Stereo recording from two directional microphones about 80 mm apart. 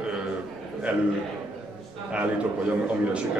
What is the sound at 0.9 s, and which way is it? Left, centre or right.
Speech, centre.